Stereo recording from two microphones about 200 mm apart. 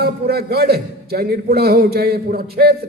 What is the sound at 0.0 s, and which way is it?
A man's voice, 50° right (ahead or behind).